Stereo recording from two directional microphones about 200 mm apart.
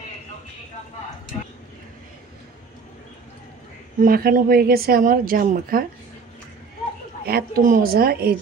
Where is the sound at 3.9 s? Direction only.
45° right (ahead or behind).